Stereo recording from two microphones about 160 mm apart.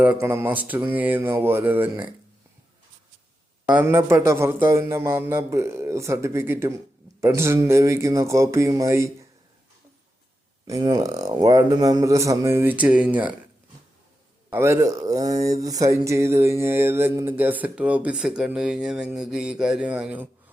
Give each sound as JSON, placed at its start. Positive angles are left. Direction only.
{"t": 0.0, "sound": "mantra", "side_deg": -10}
{"t": 3.8, "sound": "mantra", "side_deg": -15}
{"t": 7.2, "sound": "a man's voice", "side_deg": -15}
{"t": 10.7, "sound": "a man's voice", "side_deg": -25}
{"t": 14.5, "sound": "a man's voice", "side_deg": -15}
{"t": 15.4, "sound": "mantra", "side_deg": -20}